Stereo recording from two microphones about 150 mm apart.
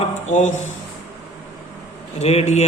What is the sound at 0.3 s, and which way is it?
Speech, 50° left (ahead or behind).